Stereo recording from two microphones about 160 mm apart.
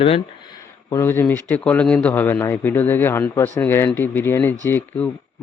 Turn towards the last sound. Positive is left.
turn(degrees=10)  # may be behind; listen again after turning